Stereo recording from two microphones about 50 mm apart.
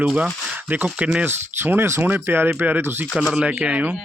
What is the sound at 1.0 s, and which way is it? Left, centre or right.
Speech, right.